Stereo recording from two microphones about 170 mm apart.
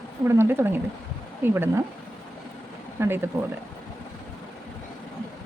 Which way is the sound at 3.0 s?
15° right (ahead or behind).